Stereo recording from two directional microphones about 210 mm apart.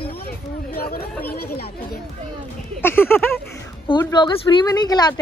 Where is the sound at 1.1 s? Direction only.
10° left (ahead or behind).